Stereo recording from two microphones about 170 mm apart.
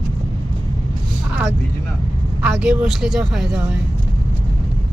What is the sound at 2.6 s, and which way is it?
Speech, 5° right (ahead or behind).